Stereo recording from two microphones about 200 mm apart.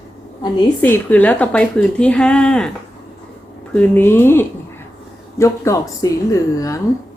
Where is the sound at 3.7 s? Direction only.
10° left (ahead or behind).